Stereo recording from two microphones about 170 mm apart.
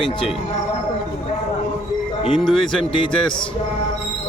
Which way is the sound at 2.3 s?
5° left (ahead or behind).